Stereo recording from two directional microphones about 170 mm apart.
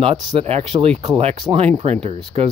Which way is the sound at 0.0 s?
35° right (ahead or behind).